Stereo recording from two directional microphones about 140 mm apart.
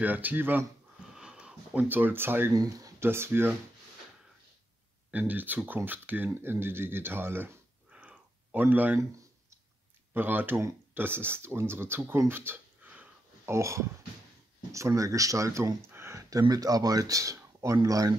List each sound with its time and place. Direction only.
0.0 s speech: 10° right (ahead or behind)
2.5 s speech: 25° right (ahead or behind)
5.1 s speech: 10° right (ahead or behind)
10.1 s speech: 15° right (ahead or behind)
13.6 s speech: 20° right (ahead or behind)